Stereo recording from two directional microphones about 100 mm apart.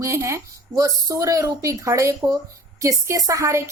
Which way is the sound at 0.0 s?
25° right (ahead or behind).